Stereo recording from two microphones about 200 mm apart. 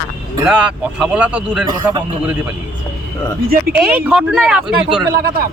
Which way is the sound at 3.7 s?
5° right (ahead or behind).